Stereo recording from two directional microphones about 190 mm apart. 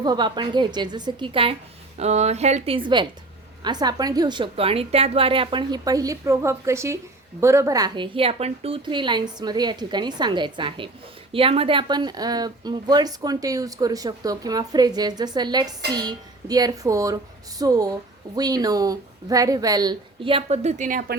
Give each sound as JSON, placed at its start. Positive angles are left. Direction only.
{"t": 0.0, "sound": "a woman's voice", "side_deg": -20}